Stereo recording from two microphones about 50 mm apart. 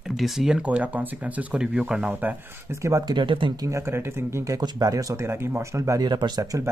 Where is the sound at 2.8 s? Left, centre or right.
Right.